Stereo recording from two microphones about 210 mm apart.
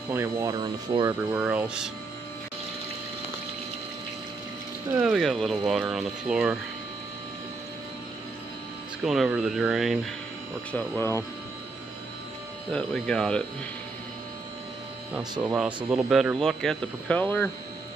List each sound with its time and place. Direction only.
0.1 s speech: 15° right (ahead or behind)
1.3 s speech: 5° right (ahead or behind)
5.0 s speech: centre (ahead or behind)
9.0 s speech: centre (ahead or behind)
10.7 s speech: 10° left (ahead or behind)
12.7 s speech: 5° left (ahead or behind)
15.4 s speech: 5° right (ahead or behind)